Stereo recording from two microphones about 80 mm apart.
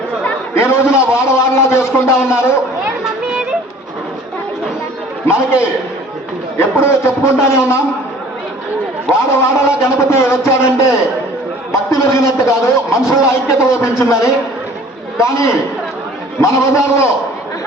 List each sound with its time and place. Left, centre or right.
0.5 s a sound: left
6.6 s a man's voice: left
9.4 s a man's voice: left